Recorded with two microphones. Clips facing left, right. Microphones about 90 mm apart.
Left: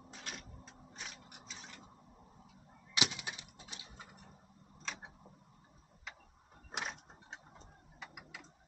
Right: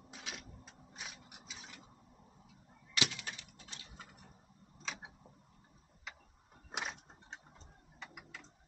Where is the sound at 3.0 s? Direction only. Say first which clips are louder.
Even; 20° left (ahead or behind).